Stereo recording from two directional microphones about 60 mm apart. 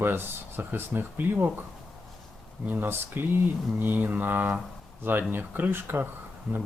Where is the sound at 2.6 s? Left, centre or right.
Right.